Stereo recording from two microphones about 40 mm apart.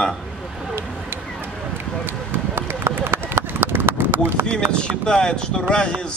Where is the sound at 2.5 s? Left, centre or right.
Right.